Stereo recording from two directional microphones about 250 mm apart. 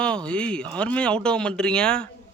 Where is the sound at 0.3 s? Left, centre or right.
Centre.